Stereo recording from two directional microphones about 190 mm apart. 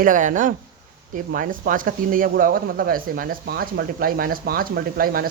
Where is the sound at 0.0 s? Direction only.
40° right (ahead or behind).